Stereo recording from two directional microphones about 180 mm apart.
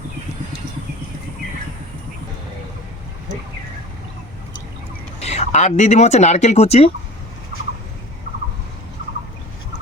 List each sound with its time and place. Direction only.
5.2 s speech: 40° left (ahead or behind)